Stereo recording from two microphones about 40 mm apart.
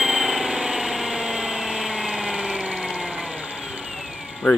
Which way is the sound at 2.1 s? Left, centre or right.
Centre.